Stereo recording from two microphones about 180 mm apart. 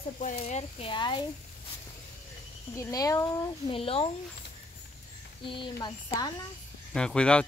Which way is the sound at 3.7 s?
30° left (ahead or behind).